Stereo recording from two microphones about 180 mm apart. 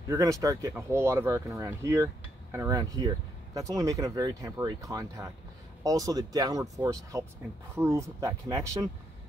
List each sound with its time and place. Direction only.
0.1 s speech: 20° right (ahead or behind)